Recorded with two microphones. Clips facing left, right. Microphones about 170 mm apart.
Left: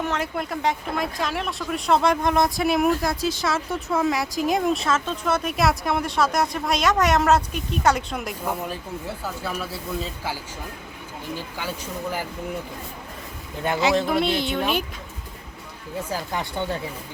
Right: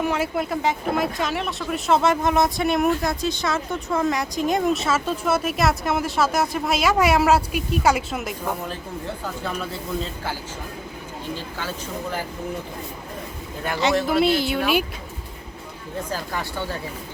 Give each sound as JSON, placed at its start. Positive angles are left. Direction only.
{"t": 0.0, "sound": "speech", "side_deg": -5}
{"t": 14.1, "sound": "speech", "side_deg": -5}
{"t": 16.0, "sound": "speech", "side_deg": 15}